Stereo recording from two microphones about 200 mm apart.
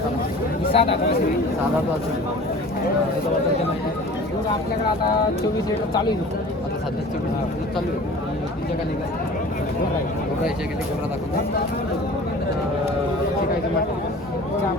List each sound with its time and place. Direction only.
0.7 s speech: 30° left (ahead or behind)